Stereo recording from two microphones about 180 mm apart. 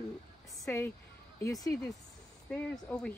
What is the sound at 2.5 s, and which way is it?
Speech, 5° left (ahead or behind).